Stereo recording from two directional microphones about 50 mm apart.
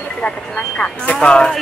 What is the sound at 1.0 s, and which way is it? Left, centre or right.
Speech, left.